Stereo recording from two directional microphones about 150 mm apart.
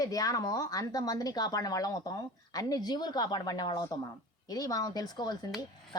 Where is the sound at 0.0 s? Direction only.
25° left (ahead or behind).